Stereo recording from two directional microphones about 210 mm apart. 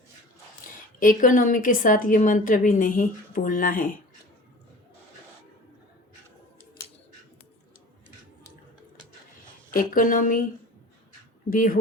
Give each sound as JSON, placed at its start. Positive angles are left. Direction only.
{"t": 0.9, "sound": "a woman's voice", "side_deg": 40}
{"t": 9.7, "sound": "a woman's voice", "side_deg": 40}
{"t": 11.5, "sound": "a woman's voice", "side_deg": 40}